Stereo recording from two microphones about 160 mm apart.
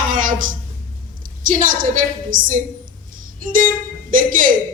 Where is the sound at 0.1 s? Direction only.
55° right (ahead or behind).